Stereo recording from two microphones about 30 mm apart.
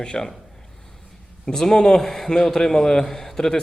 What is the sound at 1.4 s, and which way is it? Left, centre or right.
A man's voice, centre.